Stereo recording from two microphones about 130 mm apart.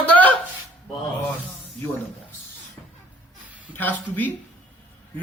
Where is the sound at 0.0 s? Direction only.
10° left (ahead or behind).